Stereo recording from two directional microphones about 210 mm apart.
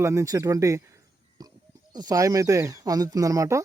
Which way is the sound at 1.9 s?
20° right (ahead or behind).